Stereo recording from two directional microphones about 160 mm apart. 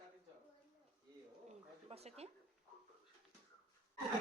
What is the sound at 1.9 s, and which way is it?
Speech, 40° right (ahead or behind).